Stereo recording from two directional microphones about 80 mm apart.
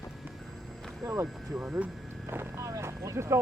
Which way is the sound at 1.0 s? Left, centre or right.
Right.